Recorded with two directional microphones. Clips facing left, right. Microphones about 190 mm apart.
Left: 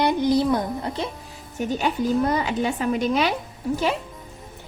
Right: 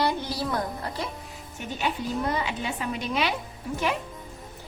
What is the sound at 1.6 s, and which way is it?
Speech, 45° left (ahead or behind).